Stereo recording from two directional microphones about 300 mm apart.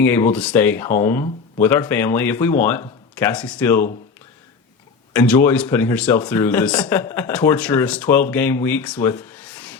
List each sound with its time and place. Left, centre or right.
0.0 s speech: centre
5.1 s speech: centre